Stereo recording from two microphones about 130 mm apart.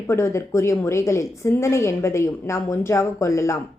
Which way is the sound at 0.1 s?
20° left (ahead or behind).